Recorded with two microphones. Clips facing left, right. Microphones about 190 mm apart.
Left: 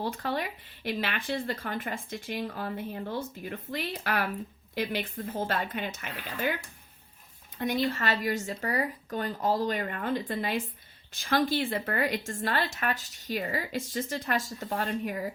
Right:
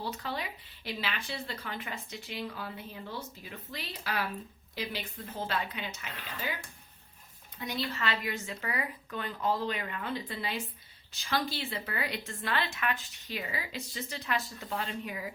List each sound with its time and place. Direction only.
0.0 s a woman's voice: 55° left (ahead or behind)
7.6 s a woman's voice: 50° left (ahead or behind)